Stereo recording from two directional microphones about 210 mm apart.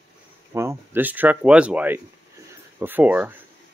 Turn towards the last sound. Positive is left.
turn(degrees=-10)  # may be behind; listen again after turning